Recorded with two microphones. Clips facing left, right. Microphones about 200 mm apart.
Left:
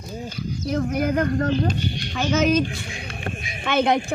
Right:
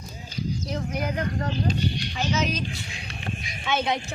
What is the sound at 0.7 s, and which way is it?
Speech, 50° left (ahead or behind).